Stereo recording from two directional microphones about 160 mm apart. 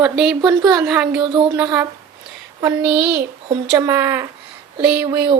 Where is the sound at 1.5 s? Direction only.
5° right (ahead or behind).